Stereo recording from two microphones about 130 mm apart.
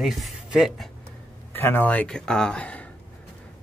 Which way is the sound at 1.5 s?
15° left (ahead or behind).